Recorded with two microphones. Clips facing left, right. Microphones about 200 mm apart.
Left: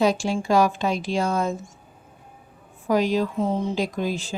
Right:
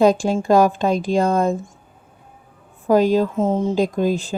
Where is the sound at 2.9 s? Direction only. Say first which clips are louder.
Right 6 dB; 50° right (ahead or behind).